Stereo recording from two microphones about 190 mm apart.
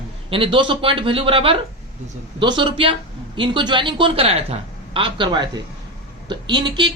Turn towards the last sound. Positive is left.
turn(degrees=-25)  # may be behind; listen again after turning